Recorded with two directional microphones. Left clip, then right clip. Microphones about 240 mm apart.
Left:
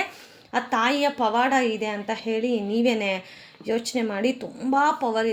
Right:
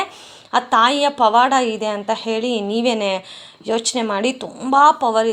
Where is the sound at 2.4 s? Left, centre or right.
Centre.